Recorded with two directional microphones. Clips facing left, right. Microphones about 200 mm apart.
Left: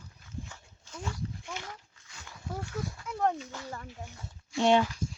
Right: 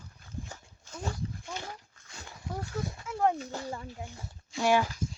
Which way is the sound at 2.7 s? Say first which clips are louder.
Right 1 dB; 25° right (ahead or behind).